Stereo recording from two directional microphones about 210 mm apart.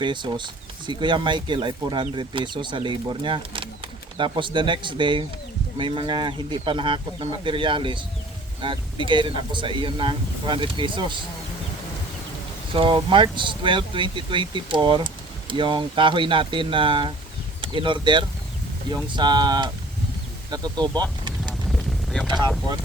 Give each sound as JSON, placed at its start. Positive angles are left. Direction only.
{"t": 0.0, "sound": "speech", "side_deg": -20}
{"t": 12.7, "sound": "speech", "side_deg": -25}
{"t": 21.4, "sound": "a sound", "side_deg": 0}